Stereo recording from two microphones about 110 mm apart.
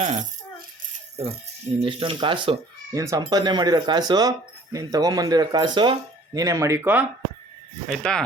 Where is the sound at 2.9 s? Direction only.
30° right (ahead or behind); by 6.4 s 45° right (ahead or behind).